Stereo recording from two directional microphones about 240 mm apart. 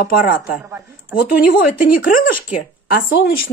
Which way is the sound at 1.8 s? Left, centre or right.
Left.